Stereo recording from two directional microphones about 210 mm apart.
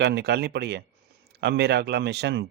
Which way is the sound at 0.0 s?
50° right (ahead or behind).